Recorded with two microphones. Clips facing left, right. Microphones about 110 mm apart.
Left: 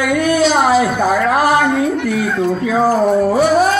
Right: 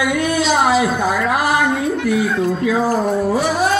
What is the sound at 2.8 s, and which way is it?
Speech, 30° left (ahead or behind).